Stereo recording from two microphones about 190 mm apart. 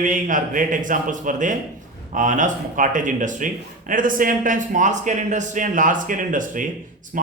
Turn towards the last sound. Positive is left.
turn(degrees=-45)  # may be behind; listen again after turning